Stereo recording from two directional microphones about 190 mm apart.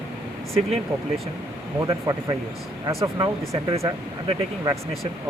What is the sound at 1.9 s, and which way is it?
Speech, 25° right (ahead or behind).